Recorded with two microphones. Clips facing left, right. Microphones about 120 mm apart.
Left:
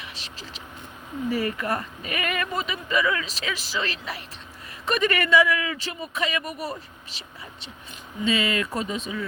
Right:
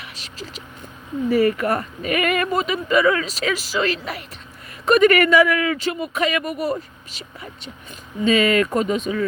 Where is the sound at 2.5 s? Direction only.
40° right (ahead or behind).